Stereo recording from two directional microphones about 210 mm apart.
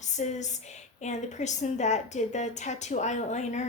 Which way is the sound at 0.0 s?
35° left (ahead or behind).